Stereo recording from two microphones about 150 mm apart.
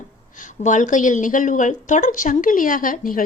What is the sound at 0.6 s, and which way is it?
A woman's voice, 55° left (ahead or behind).